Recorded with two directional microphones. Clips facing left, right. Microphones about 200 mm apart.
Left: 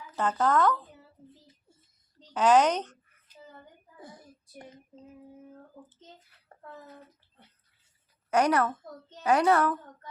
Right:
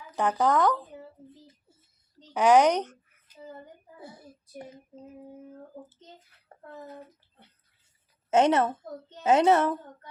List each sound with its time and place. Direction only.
0.2 s speech: 15° right (ahead or behind)
2.3 s speech: 10° right (ahead or behind)
4.0 s child singing: 10° right (ahead or behind)
6.5 s a sound: 15° right (ahead or behind)
8.3 s speech: 25° right (ahead or behind)